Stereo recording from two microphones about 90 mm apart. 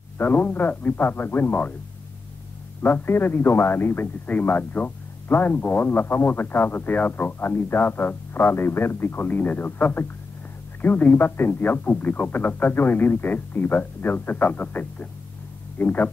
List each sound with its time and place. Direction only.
0.2 s speech: 20° left (ahead or behind)
2.8 s speech: 25° left (ahead or behind)